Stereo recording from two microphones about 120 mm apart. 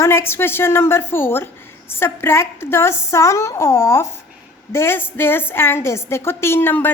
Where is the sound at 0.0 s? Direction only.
20° left (ahead or behind).